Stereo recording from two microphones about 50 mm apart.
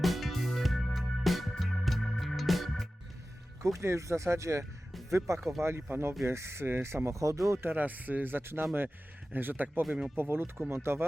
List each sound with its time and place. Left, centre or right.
0.0 s music: centre
1.2 s organ: centre
3.6 s speech: right
5.6 s speech: right
7.6 s speech: right
10.2 s speech: right